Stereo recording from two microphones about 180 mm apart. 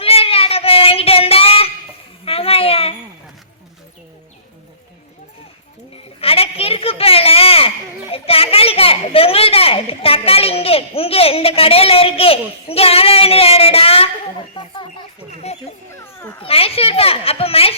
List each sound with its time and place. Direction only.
0.0 s child singing: 35° left (ahead or behind)
2.2 s a sound: 30° left (ahead or behind)
6.1 s a sound: 30° left (ahead or behind)
8.1 s a child's voice: 30° left (ahead or behind)
15.9 s children playing: 15° left (ahead or behind)
16.4 s a child's voice: 30° left (ahead or behind)